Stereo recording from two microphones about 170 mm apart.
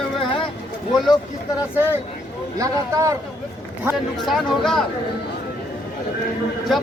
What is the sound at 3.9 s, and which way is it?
Speech, centre (ahead or behind).